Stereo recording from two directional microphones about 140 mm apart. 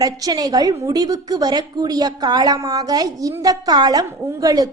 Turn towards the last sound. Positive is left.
turn(degrees=-25)  # may be behind; listen again after turning